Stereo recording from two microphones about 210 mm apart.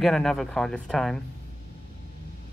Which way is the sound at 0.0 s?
Centre (ahead or behind).